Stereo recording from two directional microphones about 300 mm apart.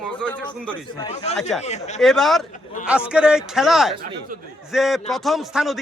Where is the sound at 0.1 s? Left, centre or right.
Centre.